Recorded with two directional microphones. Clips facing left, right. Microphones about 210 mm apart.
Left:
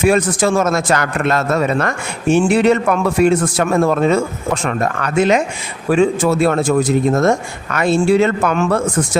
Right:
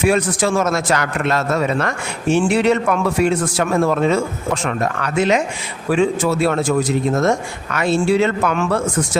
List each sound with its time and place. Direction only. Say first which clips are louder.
0.0 s speech: left 3 dB; 45° left (ahead or behind)